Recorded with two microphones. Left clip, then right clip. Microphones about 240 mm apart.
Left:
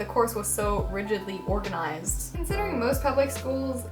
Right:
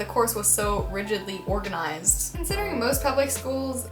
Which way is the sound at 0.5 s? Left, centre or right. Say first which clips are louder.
Right 1 dB; centre.